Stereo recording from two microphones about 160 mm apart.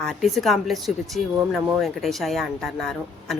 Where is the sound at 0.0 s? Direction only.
Centre (ahead or behind).